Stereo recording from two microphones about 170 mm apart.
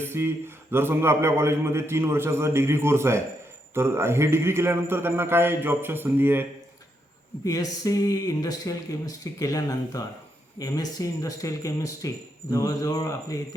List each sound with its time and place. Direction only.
0.0 s a man's voice: 15° right (ahead or behind)
7.4 s speech: 20° left (ahead or behind)